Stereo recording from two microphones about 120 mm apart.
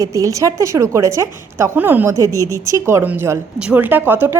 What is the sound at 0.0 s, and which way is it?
Speech, 25° right (ahead or behind).